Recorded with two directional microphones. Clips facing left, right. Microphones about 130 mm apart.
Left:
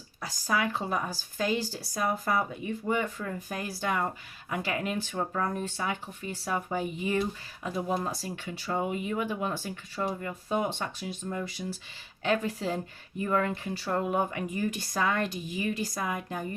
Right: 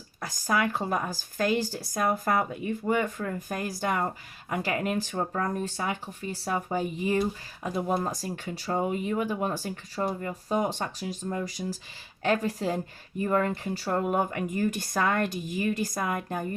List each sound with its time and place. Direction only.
0.2 s speech: 50° right (ahead or behind)